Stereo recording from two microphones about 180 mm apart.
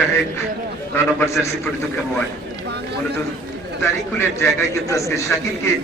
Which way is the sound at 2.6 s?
65° right (ahead or behind).